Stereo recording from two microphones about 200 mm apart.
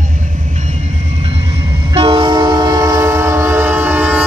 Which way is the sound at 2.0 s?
25° right (ahead or behind).